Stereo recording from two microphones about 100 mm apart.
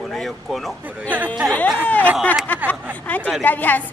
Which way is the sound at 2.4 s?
15° left (ahead or behind).